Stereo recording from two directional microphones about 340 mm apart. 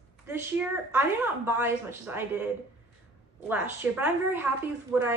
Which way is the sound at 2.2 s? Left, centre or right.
Centre.